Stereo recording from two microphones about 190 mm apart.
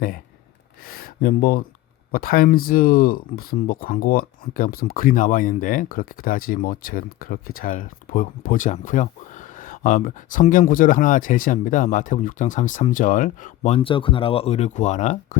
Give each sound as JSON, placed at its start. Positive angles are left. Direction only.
{"t": 0.9, "sound": "speech", "side_deg": 50}